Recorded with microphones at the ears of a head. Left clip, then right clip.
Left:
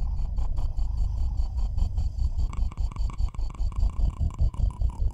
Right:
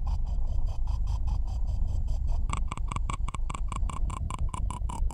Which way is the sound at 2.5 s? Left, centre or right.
Right.